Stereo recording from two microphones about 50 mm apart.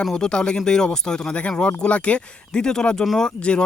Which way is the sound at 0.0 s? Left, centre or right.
Centre.